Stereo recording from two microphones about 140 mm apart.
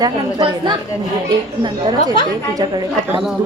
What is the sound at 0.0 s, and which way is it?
A woman's voice, 30° right (ahead or behind).